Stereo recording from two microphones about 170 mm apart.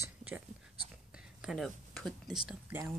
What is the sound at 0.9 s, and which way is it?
Speech, 5° right (ahead or behind).